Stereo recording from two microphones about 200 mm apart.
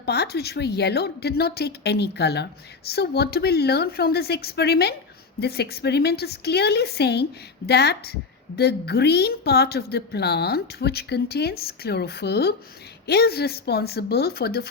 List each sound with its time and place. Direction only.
0.0 s a woman's voice: 55° left (ahead or behind)